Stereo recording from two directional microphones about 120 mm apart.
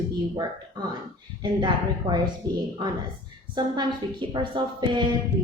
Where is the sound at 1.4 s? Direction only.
40° right (ahead or behind).